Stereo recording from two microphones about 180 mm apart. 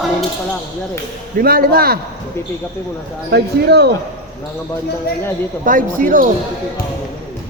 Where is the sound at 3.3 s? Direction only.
65° right (ahead or behind).